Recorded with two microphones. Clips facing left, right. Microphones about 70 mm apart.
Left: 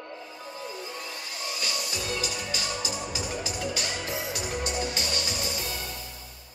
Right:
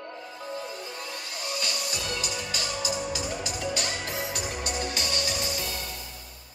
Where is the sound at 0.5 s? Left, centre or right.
Right.